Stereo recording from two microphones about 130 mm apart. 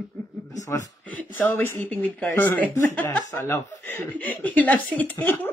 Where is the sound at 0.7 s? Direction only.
20° left (ahead or behind).